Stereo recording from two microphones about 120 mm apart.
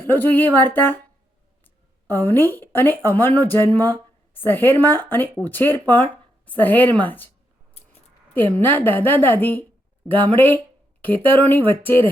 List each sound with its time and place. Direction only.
0.0 s a woman's voice: 15° left (ahead or behind)
8.5 s a woman's voice: 15° left (ahead or behind)